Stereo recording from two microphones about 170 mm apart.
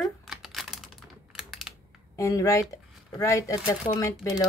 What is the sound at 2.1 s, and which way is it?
Speech, 20° left (ahead or behind).